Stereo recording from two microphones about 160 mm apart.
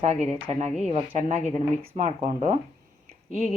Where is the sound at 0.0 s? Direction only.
45° right (ahead or behind).